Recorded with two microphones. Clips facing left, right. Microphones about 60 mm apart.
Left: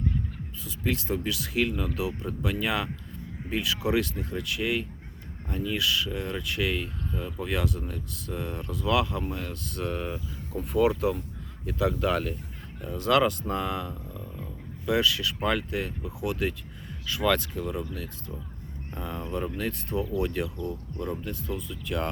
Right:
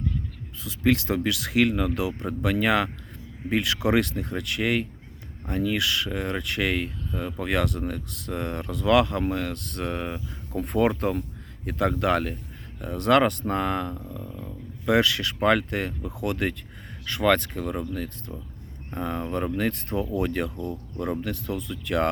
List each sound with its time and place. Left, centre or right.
0.6 s speech: right
3.5 s speech: right
14.4 s speech: right
15.4 s speech: right
21.0 s speech: right